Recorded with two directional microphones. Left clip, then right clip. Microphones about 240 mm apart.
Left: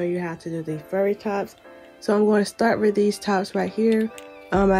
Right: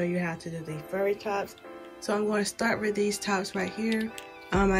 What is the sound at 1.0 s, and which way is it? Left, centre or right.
A woman's voice, left.